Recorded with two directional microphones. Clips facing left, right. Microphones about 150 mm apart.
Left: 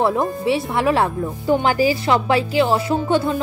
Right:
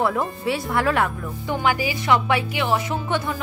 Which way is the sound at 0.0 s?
25° left (ahead or behind).